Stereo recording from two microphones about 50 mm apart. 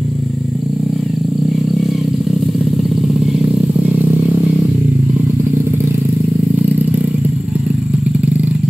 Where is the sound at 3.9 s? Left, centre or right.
Right.